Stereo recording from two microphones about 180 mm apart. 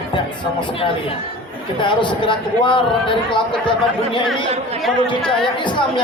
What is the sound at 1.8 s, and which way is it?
A man's voice, 25° left (ahead or behind).